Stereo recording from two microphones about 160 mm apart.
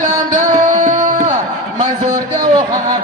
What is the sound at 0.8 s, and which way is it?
Tabla, 50° right (ahead or behind).